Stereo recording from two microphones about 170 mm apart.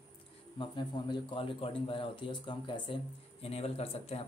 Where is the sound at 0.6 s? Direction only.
25° left (ahead or behind).